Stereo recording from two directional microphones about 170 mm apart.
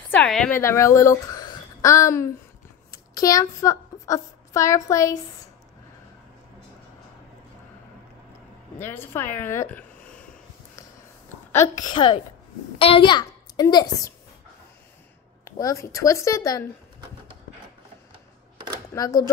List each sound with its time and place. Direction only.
0.1 s speech: 5° left (ahead or behind)
8.7 s a woman's voice: 15° left (ahead or behind)
11.5 s a woman's voice: 15° left (ahead or behind)
11.9 s a woman's voice: 30° left (ahead or behind)
15.4 s a woman's voice: 20° left (ahead or behind)
18.9 s a woman's voice: 20° left (ahead or behind)